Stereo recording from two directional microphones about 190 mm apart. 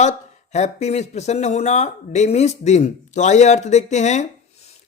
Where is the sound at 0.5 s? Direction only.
35° left (ahead or behind).